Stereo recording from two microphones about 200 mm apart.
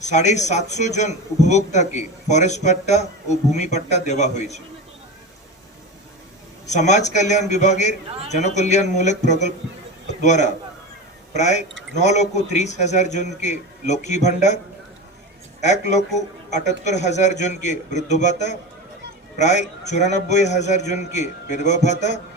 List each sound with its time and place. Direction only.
0.0 s a man's voice: 35° left (ahead or behind)
6.7 s a man's voice: 35° left (ahead or behind)
15.6 s a man's voice: 35° left (ahead or behind)